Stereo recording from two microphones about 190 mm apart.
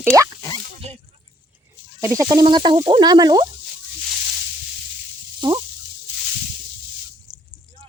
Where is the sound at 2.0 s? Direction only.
20° right (ahead or behind).